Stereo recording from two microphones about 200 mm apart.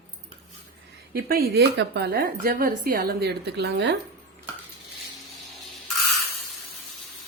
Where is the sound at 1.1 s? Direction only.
50° right (ahead or behind).